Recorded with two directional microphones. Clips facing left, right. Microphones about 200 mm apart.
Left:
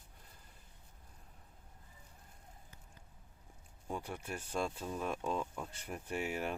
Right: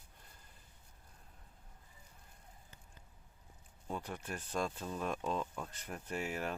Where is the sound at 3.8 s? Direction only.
10° left (ahead or behind).